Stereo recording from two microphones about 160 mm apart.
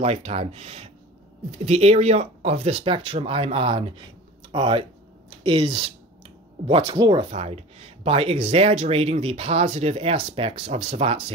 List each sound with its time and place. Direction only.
0.0 s speech: 40° right (ahead or behind)
7.2 s speech: 40° right (ahead or behind)